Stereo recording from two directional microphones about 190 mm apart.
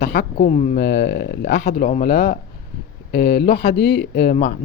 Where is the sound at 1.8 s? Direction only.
45° left (ahead or behind).